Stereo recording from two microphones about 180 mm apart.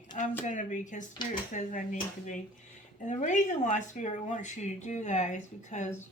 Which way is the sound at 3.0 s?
45° left (ahead or behind).